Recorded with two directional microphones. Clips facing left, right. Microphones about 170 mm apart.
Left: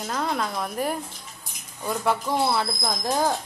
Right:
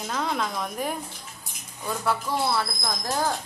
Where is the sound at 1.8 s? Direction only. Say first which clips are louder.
Left 2 dB; 15° left (ahead or behind).